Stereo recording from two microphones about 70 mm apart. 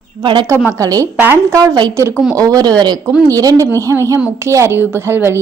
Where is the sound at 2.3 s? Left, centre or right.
Right.